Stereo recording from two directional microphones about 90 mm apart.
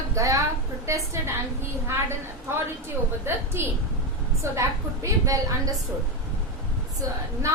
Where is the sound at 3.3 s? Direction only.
25° right (ahead or behind).